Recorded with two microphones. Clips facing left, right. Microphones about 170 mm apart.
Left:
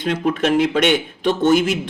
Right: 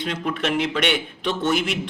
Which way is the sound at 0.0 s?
45° left (ahead or behind).